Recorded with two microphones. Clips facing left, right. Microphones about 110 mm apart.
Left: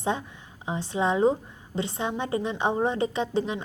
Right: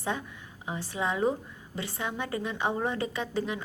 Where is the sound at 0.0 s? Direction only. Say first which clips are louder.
Left 5 dB; 25° left (ahead or behind).